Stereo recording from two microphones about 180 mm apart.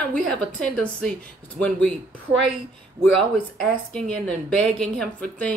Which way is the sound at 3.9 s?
5° left (ahead or behind).